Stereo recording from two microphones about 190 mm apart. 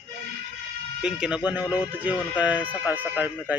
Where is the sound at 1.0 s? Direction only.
5° right (ahead or behind).